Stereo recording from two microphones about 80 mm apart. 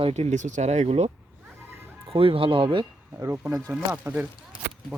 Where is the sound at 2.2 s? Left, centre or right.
Right.